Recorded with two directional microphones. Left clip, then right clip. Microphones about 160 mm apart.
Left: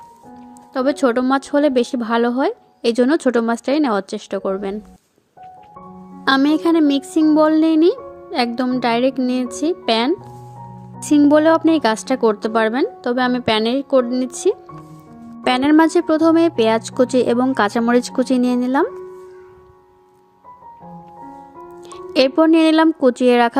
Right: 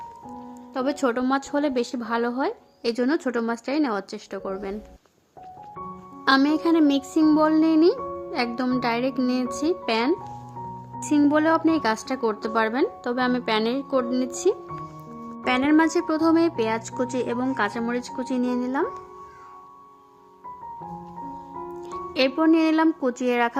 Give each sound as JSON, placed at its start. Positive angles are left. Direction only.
{"t": 0.7, "sound": "a woman's voice", "side_deg": 30}
{"t": 6.2, "sound": "a woman's voice", "side_deg": 30}
{"t": 11.3, "sound": "a woman's voice", "side_deg": 35}
{"t": 15.4, "sound": "a woman's voice", "side_deg": 40}
{"t": 21.8, "sound": "a woman's voice", "side_deg": 40}